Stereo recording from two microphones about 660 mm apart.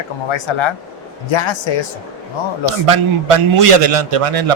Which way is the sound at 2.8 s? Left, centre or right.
Right.